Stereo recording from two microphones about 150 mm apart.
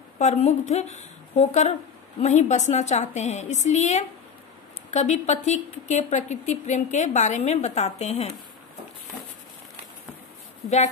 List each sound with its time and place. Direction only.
0.2 s a woman's voice: 50° left (ahead or behind)